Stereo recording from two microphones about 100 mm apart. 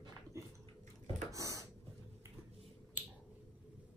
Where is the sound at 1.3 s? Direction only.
35° right (ahead or behind).